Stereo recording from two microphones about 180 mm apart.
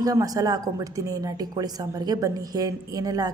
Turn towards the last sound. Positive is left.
turn(degrees=-20)  # may be behind; listen again after turning